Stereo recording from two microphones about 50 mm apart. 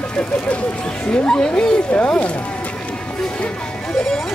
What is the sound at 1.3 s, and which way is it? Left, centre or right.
Speech, left.